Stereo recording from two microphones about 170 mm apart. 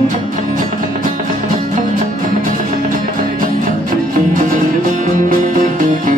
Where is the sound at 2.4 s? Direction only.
50° right (ahead or behind).